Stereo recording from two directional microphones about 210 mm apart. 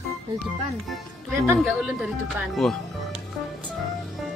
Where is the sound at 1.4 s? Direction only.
5° right (ahead or behind).